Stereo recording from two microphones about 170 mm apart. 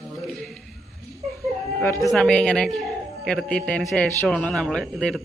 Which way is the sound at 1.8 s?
15° left (ahead or behind).